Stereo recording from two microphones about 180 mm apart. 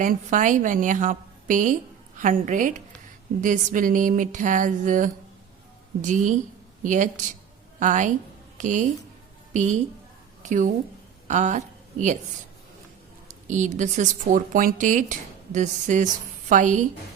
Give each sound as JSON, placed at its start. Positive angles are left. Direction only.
{"t": 0.0, "sound": "a woman's voice", "side_deg": -45}
{"t": 13.2, "sound": "a woman's voice", "side_deg": -45}